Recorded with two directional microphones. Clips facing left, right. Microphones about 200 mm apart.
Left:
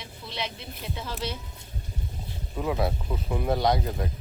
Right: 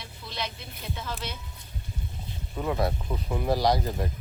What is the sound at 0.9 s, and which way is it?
Speech, 30° left (ahead or behind).